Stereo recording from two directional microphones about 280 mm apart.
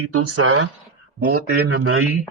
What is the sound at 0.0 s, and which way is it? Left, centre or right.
Speech, right.